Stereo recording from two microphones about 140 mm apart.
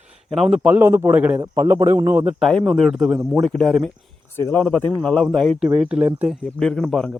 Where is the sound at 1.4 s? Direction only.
25° right (ahead or behind).